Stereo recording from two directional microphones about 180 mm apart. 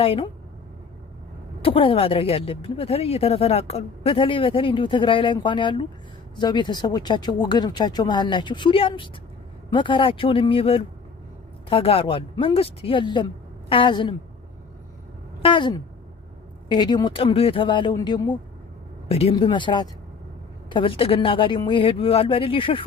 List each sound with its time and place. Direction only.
0.0 s speech: 30° left (ahead or behind)
1.6 s speech: 30° left (ahead or behind)
15.4 s speech: 30° left (ahead or behind)
19.0 s speech: 35° left (ahead or behind)